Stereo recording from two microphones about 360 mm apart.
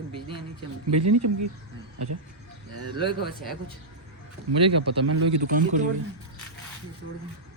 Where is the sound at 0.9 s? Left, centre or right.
Right.